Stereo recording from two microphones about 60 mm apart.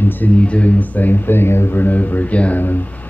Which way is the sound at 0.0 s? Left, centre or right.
Left.